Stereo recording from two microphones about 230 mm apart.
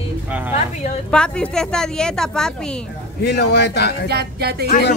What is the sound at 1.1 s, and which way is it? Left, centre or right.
A woman's voice, centre.